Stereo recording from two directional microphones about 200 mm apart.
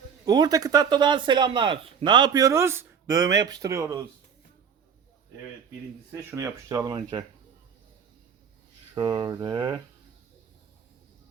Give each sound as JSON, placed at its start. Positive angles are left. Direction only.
{"t": 0.3, "sound": "speech", "side_deg": -20}
{"t": 6.1, "sound": "speech", "side_deg": -15}
{"t": 9.0, "sound": "speech", "side_deg": -20}